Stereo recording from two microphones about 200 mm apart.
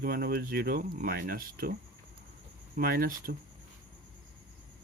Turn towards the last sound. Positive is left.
turn(degrees=-45)  # may be behind; listen again after turning